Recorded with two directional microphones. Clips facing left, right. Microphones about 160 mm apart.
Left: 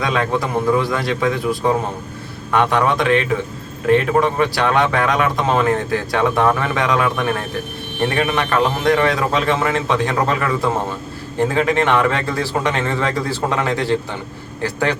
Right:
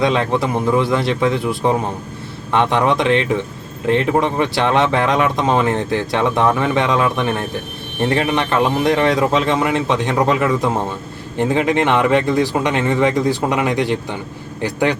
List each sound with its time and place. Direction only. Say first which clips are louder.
0.0 s a man's voice: right 3 dB; 25° right (ahead or behind)